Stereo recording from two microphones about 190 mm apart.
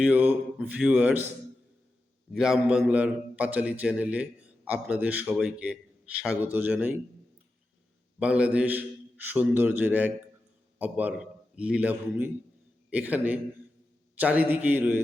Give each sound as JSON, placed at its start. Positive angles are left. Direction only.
{"t": 0.0, "sound": "a man's voice", "side_deg": -10}
{"t": 2.3, "sound": "a man's voice", "side_deg": 0}
{"t": 8.2, "sound": "a man's voice", "side_deg": -5}